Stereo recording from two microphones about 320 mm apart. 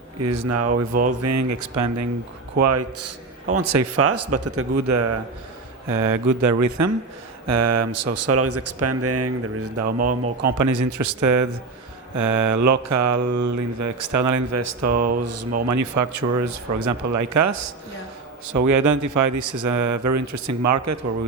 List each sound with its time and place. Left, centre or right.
0.2 s a man's voice: right
1.0 s mantra: right
2.6 s a man's voice: right
5.9 s mantra: right
7.4 s a man's voice: right
10.4 s mantra: right
14.9 s speech: right
15.2 s a man's voice: right
15.6 s mantra: right